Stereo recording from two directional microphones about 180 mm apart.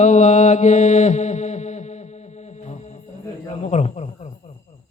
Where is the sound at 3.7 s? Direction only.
40° left (ahead or behind).